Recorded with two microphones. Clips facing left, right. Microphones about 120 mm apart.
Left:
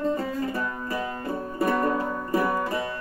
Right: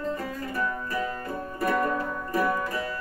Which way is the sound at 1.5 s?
30° left (ahead or behind).